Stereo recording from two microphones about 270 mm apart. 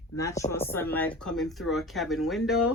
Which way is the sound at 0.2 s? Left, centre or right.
Centre.